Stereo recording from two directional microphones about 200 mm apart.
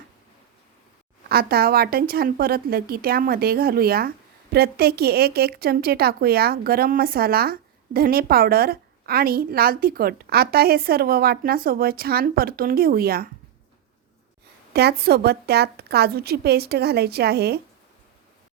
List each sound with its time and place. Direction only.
1.3 s a woman's voice: 50° right (ahead or behind)
14.7 s a woman's voice: 55° right (ahead or behind)